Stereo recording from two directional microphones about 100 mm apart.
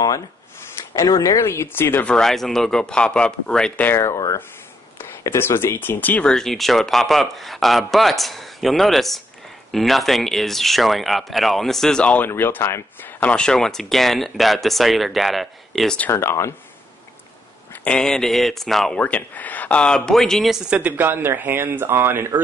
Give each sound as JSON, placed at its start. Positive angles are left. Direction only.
{"t": 0.9, "sound": "speech", "side_deg": 35}
{"t": 2.0, "sound": "a man's voice", "side_deg": 5}
{"t": 4.1, "sound": "speech", "side_deg": 35}
{"t": 6.3, "sound": "speech", "side_deg": 0}
{"t": 12.3, "sound": "speech", "side_deg": 20}
{"t": 13.2, "sound": "speech", "side_deg": 10}
{"t": 16.1, "sound": "speech", "side_deg": 25}
{"t": 17.8, "sound": "speech", "side_deg": 5}
{"t": 18.9, "sound": "a man's voice", "side_deg": 15}
{"t": 20.7, "sound": "speech", "side_deg": -15}